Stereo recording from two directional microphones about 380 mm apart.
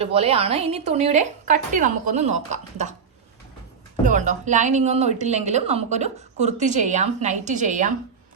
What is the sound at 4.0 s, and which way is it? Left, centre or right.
A woman's voice, centre.